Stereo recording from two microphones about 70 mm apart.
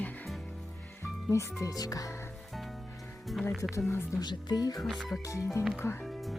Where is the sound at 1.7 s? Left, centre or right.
Left.